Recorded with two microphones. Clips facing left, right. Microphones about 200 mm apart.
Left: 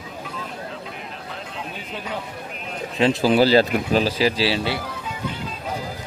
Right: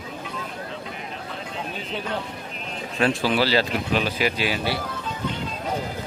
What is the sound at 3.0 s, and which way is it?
Speech, 25° left (ahead or behind).